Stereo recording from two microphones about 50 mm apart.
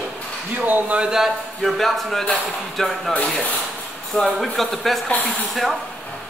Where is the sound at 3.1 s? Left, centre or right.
Left.